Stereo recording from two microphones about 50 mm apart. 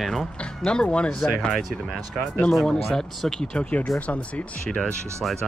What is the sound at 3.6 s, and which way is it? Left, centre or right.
Speech, left.